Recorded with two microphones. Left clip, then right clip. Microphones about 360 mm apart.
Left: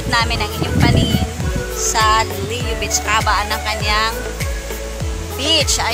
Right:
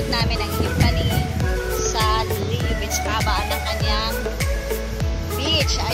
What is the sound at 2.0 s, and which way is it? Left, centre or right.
Music, right.